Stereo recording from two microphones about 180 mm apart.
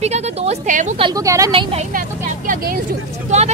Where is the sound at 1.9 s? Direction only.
50° right (ahead or behind).